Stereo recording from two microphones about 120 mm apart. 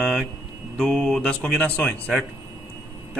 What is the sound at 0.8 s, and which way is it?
A man's voice, 5° left (ahead or behind).